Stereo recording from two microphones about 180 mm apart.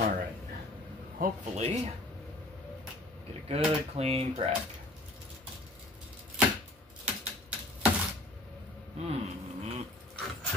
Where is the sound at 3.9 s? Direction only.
35° right (ahead or behind).